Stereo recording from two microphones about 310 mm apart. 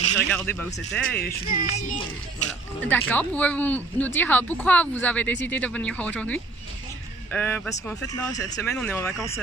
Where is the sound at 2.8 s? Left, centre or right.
Centre.